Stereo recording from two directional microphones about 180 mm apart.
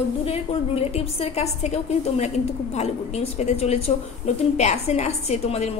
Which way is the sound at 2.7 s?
40° left (ahead or behind).